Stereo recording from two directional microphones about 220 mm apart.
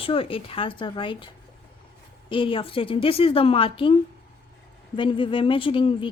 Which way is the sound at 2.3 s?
25° left (ahead or behind).